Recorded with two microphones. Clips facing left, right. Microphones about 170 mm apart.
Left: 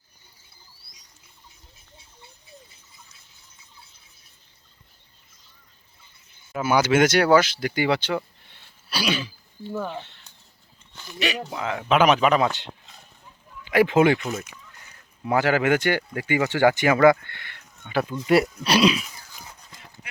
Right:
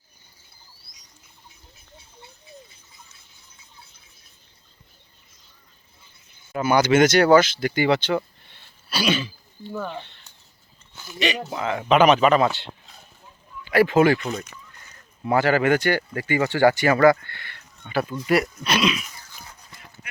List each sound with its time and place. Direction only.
6.5 s speech: 5° left (ahead or behind)
10.9 s a sound: 5° right (ahead or behind)
11.2 s speech: 10° left (ahead or behind)
11.7 s speech: 5° right (ahead or behind)
11.9 s speech: 10° left (ahead or behind)
13.7 s speech: 15° left (ahead or behind)
14.0 s speech: centre (ahead or behind); by 19.0 s 30° left (ahead or behind)